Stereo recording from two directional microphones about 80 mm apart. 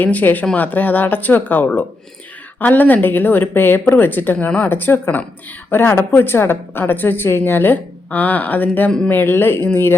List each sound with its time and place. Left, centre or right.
0.0 s a woman's voice: left